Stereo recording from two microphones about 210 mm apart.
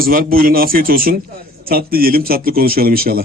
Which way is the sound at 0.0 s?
45° right (ahead or behind).